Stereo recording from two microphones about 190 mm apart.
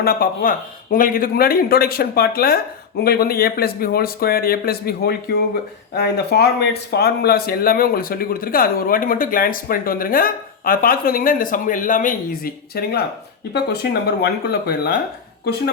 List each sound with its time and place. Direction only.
0.0 s speech: 50° left (ahead or behind)
14.2 s speech: 55° left (ahead or behind)